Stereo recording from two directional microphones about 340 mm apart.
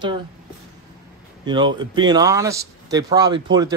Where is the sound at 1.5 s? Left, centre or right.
Centre.